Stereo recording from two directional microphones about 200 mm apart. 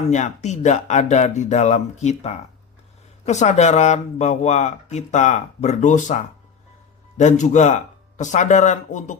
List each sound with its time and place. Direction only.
0.1 s speech: 35° left (ahead or behind)